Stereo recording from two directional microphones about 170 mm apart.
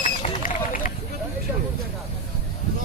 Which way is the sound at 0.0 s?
50° left (ahead or behind).